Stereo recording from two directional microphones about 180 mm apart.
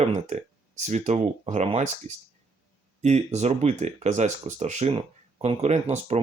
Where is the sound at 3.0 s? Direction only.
40° right (ahead or behind).